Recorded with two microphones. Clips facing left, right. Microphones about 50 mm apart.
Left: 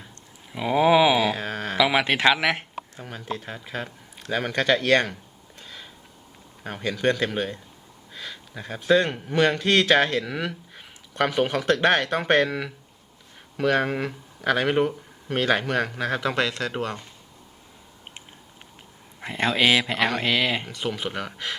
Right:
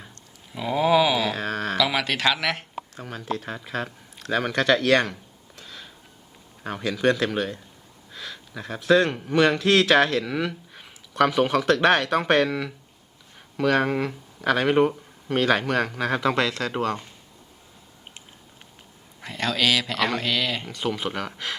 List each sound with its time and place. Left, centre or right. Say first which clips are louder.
0.5 s a sound: left 2 dB; centre
1.8 s speech: left 5 dB; left
2.9 s speech: right 3 dB; centre
5.5 s a sound: even; centre
7.3 s speech: right 1 dB; centre
8.1 s a sound: right 1 dB; centre
8.8 s speech: right 1 dB; centre
19.2 s speech: left 2 dB; left
20.7 s speech: right 2 dB; centre